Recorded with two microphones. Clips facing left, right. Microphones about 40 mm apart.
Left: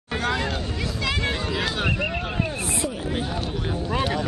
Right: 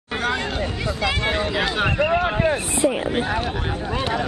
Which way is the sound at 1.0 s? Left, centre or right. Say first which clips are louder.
Right 4 dB; centre.